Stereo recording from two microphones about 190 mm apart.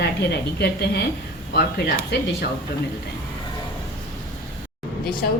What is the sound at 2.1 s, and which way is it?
Speech, 65° left (ahead or behind).